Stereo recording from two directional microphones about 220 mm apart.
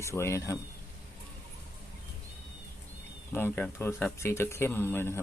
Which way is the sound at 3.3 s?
10° left (ahead or behind).